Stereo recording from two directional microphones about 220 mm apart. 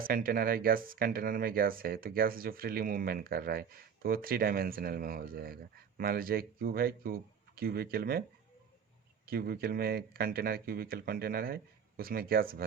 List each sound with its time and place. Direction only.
0.0 s speech: 40° right (ahead or behind)
9.2 s speech: 45° right (ahead or behind)